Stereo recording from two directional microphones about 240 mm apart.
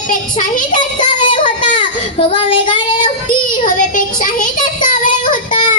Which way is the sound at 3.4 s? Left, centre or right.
Left.